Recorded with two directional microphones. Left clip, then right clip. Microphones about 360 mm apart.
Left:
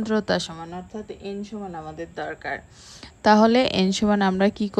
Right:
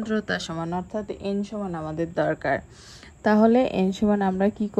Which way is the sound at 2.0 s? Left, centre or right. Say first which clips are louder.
Right 10 dB; centre.